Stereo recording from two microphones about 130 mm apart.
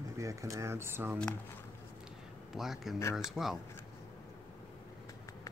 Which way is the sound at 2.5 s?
Centre (ahead or behind).